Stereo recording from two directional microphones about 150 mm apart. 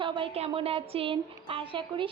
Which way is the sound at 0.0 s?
35° right (ahead or behind).